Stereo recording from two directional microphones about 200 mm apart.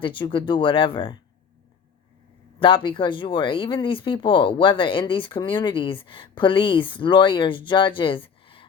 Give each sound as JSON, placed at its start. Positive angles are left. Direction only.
{"t": 0.0, "sound": "speech", "side_deg": 25}
{"t": 2.6, "sound": "speech", "side_deg": 25}